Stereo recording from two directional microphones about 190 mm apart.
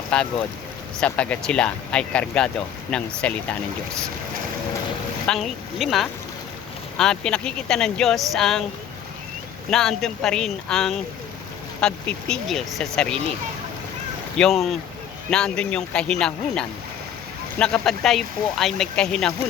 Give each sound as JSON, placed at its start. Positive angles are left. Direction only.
{"t": 0.1, "sound": "speech", "side_deg": 5}
{"t": 5.3, "sound": "speech", "side_deg": 0}
{"t": 9.6, "sound": "speech", "side_deg": 0}
{"t": 14.3, "sound": "speech", "side_deg": 0}